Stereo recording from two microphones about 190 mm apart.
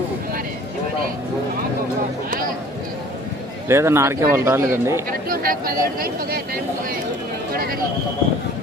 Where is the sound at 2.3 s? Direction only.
50° right (ahead or behind).